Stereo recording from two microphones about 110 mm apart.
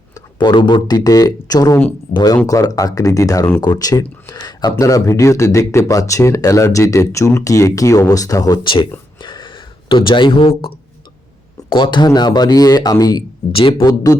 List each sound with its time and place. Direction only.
0.1 s speech: 40° left (ahead or behind)
9.2 s a sound: 45° left (ahead or behind)
11.7 s speech: 45° left (ahead or behind)
13.5 s speech: 55° left (ahead or behind)
13.8 s speech: 35° left (ahead or behind)